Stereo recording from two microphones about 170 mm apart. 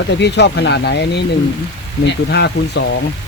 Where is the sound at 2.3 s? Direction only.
90° left.